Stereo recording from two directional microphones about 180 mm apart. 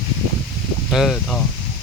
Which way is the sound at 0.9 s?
Centre (ahead or behind).